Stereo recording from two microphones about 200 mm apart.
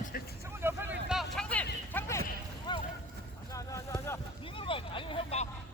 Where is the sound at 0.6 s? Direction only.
10° right (ahead or behind).